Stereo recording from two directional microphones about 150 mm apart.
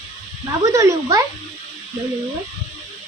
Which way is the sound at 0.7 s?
25° right (ahead or behind).